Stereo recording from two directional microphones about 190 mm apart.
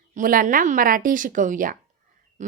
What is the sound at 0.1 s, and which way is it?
Speech, 45° right (ahead or behind).